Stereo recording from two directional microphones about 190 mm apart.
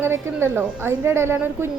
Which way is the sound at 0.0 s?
15° right (ahead or behind).